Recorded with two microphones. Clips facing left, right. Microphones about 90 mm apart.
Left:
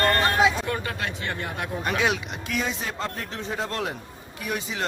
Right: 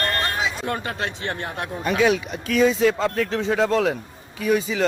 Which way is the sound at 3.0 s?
90° right.